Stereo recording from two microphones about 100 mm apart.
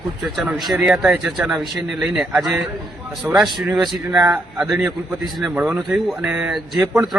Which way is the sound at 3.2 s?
30° right (ahead or behind).